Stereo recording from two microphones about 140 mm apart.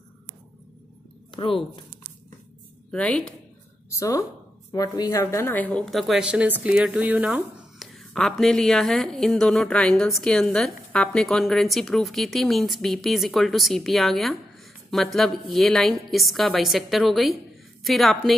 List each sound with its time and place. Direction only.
1.3 s speech: 40° left (ahead or behind)
2.9 s a woman's voice: 5° left (ahead or behind)
3.9 s a woman's voice: 25° left (ahead or behind); by 18.3 s centre (ahead or behind)